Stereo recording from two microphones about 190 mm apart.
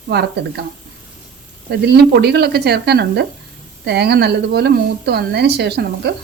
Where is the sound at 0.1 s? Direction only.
60° right (ahead or behind).